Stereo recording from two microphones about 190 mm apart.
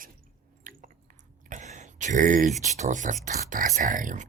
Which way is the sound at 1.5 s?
40° right (ahead or behind).